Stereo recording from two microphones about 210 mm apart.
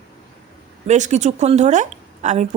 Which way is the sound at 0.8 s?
35° right (ahead or behind).